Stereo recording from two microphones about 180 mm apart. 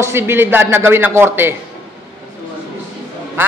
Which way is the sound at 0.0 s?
15° right (ahead or behind).